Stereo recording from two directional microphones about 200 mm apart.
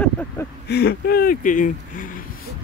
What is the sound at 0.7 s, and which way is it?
Speech, 55° left (ahead or behind).